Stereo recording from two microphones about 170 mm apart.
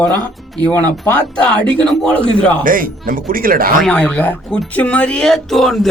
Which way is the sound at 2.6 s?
55° right (ahead or behind).